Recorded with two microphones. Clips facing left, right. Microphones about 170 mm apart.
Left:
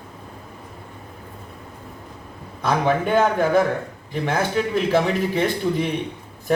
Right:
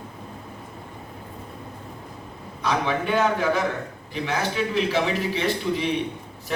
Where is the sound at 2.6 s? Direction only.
45° left (ahead or behind).